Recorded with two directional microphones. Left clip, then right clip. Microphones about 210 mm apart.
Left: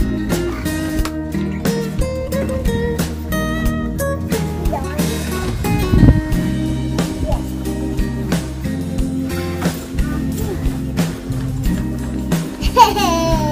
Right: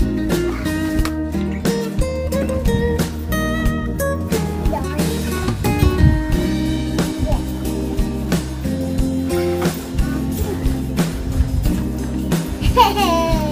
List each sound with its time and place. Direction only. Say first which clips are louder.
0.3 s music: right 1 dB; centre (ahead or behind)
5.7 s music: left 2 dB; centre (ahead or behind)
12.7 s music: left 2 dB; 50° left (ahead or behind)